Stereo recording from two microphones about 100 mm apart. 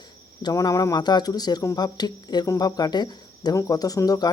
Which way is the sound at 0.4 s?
35° left (ahead or behind).